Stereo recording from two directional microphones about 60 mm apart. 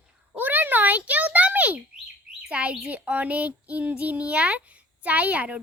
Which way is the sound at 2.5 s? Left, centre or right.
Centre.